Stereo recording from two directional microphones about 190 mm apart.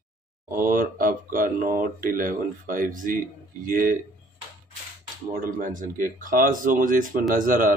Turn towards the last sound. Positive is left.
turn(degrees=-45)  # may be behind; listen again after turning